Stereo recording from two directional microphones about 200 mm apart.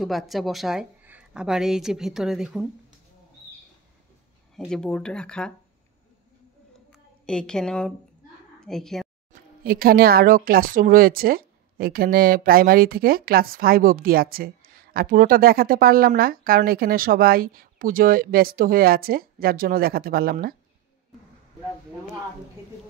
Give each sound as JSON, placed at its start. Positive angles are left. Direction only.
{"t": 0.0, "sound": "a woman's voice", "side_deg": 0}
{"t": 4.6, "sound": "a woman's voice", "side_deg": 5}
{"t": 7.2, "sound": "a woman's voice", "side_deg": 5}
{"t": 9.6, "sound": "a woman's voice", "side_deg": -50}